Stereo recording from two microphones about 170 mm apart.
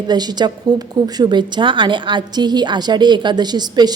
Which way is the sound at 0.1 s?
25° right (ahead or behind).